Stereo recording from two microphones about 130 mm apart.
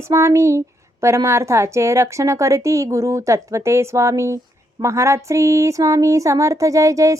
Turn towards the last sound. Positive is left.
turn(degrees=-25)  # may be behind; listen again after turning